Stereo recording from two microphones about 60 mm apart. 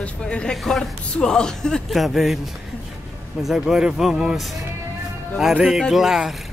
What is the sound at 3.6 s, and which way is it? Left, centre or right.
Speech, centre.